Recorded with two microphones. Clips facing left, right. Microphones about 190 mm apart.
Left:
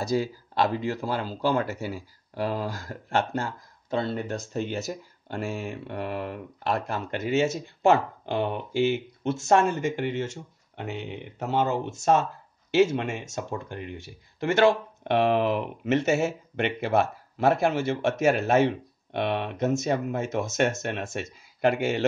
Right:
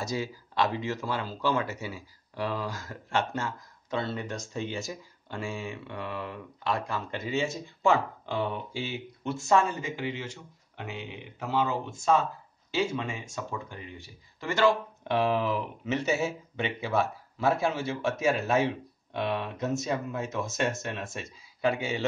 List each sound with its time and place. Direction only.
0.2 s speech: 35° left (ahead or behind)
1.9 s speech: 50° left (ahead or behind)
2.9 s speech: 40° left (ahead or behind)
4.6 s speech: 65° left (ahead or behind)
5.7 s speech: 50° left (ahead or behind)
6.9 s speech: 70° left (ahead or behind); by 11.7 s 50° left (ahead or behind)
12.0 s speech: 75° left (ahead or behind)
13.4 s speech: 60° left (ahead or behind)